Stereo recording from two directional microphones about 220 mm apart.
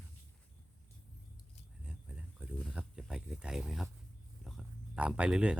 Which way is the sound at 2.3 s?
5° right (ahead or behind).